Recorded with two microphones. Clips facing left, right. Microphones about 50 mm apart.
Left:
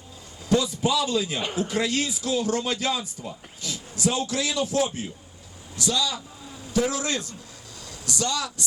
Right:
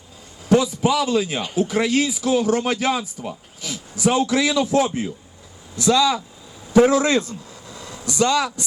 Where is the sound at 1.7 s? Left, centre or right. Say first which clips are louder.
Right 7 dB; right.